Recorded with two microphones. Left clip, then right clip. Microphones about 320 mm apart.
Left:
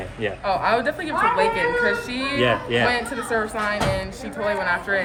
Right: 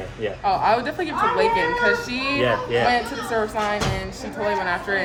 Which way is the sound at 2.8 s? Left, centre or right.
Centre.